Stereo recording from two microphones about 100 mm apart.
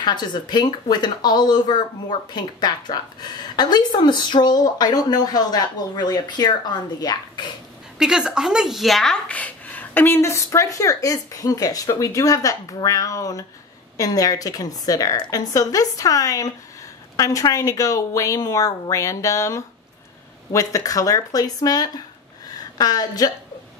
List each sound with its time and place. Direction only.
0.0 s speech: 45° left (ahead or behind)
8.0 s a woman's voice: 10° right (ahead or behind); by 23.3 s 40° left (ahead or behind)